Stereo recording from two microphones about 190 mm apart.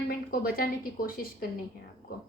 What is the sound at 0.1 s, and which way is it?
A woman's voice, 50° left (ahead or behind).